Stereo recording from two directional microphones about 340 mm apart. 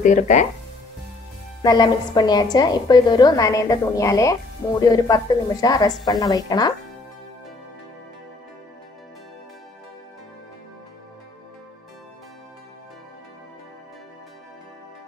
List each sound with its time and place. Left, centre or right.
0.0 s speech: left
1.6 s a woman's voice: centre